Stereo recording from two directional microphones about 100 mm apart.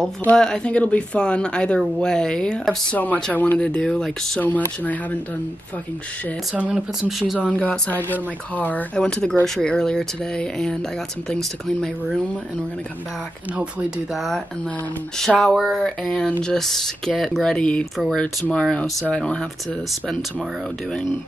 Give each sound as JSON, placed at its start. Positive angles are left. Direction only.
{"t": 0.4, "sound": "speech", "side_deg": 10}
{"t": 4.4, "sound": "speech", "side_deg": 15}
{"t": 6.5, "sound": "speech", "side_deg": -15}
{"t": 7.1, "sound": "speech", "side_deg": 0}
{"t": 7.4, "sound": "speech", "side_deg": 10}
{"t": 13.6, "sound": "speech", "side_deg": -5}